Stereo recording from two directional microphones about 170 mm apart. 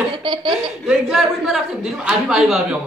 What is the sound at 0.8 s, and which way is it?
A man's voice, 5° right (ahead or behind).